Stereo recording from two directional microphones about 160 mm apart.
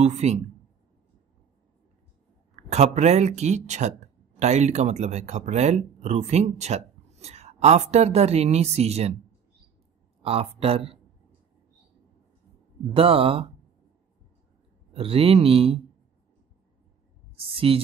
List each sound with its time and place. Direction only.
0.0 s speech: 45° right (ahead or behind)
2.5 s speech: 45° right (ahead or behind)
10.2 s speech: 35° right (ahead or behind)
12.9 s speech: 35° right (ahead or behind)
14.9 s speech: 35° right (ahead or behind)
17.5 s speech: 35° right (ahead or behind)